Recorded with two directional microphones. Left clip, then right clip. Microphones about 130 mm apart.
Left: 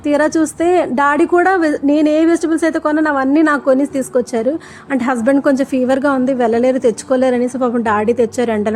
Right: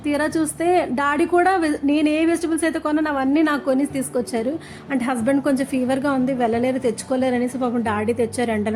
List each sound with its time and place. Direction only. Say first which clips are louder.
0.0 s a woman's voice: left 8 dB; 40° left (ahead or behind)